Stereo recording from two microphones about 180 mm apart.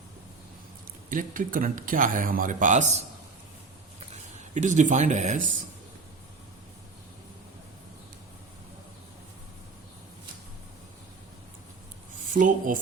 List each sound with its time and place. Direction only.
1.1 s speech: 50° right (ahead or behind)
4.4 s speech: 40° right (ahead or behind)
12.3 s speech: 45° right (ahead or behind)